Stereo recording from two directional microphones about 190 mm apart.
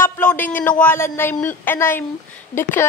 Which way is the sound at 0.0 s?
10° left (ahead or behind).